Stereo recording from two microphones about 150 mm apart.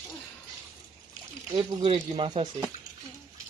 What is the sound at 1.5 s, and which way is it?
Speech, 35° right (ahead or behind).